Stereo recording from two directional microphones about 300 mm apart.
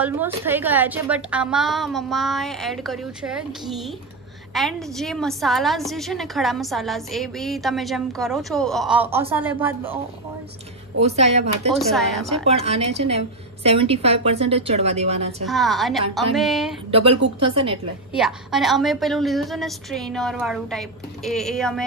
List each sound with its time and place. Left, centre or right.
0.0 s a woman's voice: centre
4.6 s a woman's voice: centre
11.0 s a woman's voice: right
11.9 s a woman's voice: centre
12.4 s a woman's voice: right
15.4 s a woman's voice: centre
16.9 s a woman's voice: centre
18.1 s a woman's voice: centre